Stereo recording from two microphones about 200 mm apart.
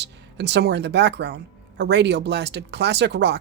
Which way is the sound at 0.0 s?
60° right (ahead or behind).